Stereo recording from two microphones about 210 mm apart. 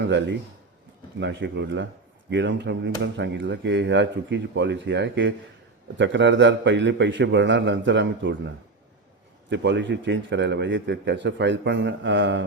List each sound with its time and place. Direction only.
1.2 s a man's voice: 55° right (ahead or behind)
9.5 s a man's voice: 55° right (ahead or behind)